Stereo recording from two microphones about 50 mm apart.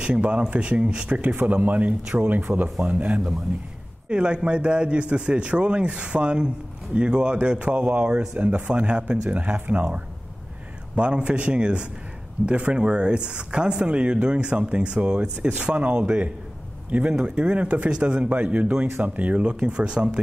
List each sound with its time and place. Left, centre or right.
0.0 s a man's voice: right
1.3 s speech: right
2.8 s a man's voice: right
11.0 s a man's voice: right